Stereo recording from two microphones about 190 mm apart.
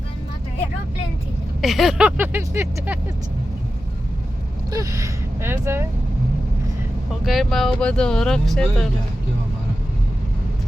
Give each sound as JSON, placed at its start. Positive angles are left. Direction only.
{"t": 1.6, "sound": "speech", "side_deg": 0}
{"t": 4.7, "sound": "speech", "side_deg": -15}
{"t": 7.3, "sound": "speech", "side_deg": 0}